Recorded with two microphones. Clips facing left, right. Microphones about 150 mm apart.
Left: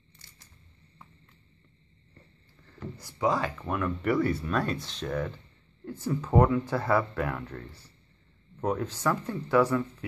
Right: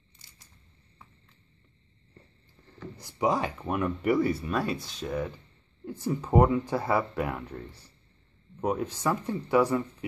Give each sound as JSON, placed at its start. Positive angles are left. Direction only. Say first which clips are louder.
{"t": 3.0, "sound": "speech", "louder": "right 1 dB", "side_deg": -20}